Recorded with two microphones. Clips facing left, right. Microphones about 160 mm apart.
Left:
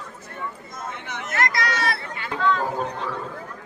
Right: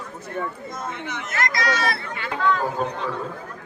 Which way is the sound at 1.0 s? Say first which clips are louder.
Left 3 dB; 55° left (ahead or behind).